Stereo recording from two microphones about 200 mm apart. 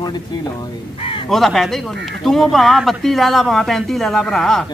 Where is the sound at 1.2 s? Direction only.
Centre (ahead or behind).